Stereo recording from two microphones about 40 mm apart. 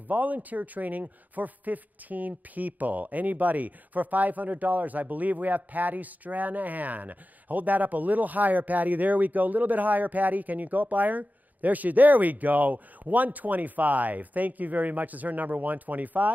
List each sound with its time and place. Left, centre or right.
0.1 s a man's voice: right